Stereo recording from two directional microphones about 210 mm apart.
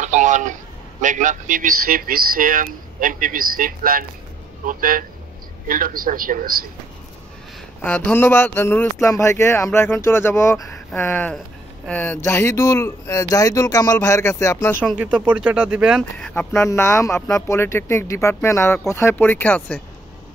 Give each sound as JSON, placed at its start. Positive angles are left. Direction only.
{"t": 0.0, "sound": "speech", "side_deg": -35}
{"t": 7.8, "sound": "speech", "side_deg": 10}
{"t": 14.9, "sound": "speech", "side_deg": -5}